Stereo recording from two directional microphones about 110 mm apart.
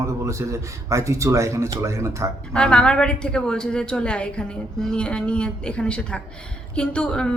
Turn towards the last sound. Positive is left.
turn(degrees=10)  # may be behind; listen again after turning